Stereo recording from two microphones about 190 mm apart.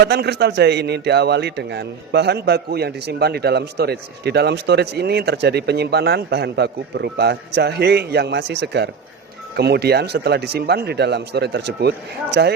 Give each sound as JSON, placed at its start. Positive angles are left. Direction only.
{"t": 0.0, "sound": "speech", "side_deg": -60}